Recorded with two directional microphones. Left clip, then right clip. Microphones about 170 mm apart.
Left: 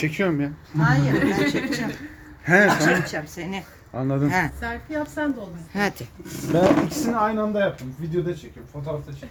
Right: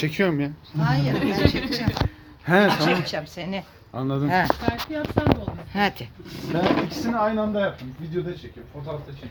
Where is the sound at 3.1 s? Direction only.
65° right (ahead or behind).